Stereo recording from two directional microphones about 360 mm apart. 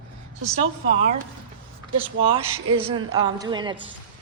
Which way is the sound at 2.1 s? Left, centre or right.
Centre.